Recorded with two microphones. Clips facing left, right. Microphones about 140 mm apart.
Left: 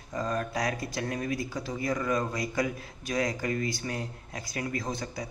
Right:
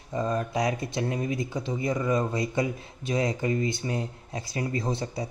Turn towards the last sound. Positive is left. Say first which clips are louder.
# right 4 dB
turn(degrees=-30)  # may be behind; listen again after turning